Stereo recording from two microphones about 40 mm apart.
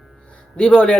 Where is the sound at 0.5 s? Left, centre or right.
Left.